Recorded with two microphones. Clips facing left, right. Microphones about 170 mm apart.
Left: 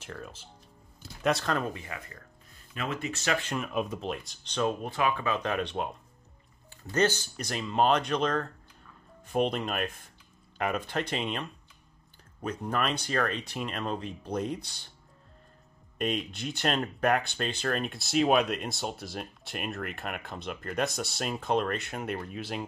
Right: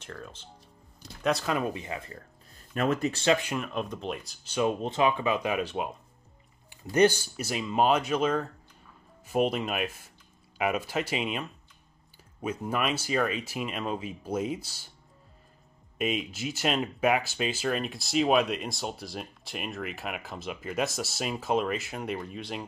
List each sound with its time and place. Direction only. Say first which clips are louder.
0.0 s speech: even; 5° left (ahead or behind); by 2.1 s 25° right (ahead or behind)
2.7 s speech: right 7 dB; 45° right (ahead or behind)
3.5 s speech: left 1 dB; 5° left (ahead or behind)
4.7 s speech: right 3 dB; 20° right (ahead or behind); by 14.9 s 5° right (ahead or behind)
16.0 s speech: right 1 dB; 5° right (ahead or behind)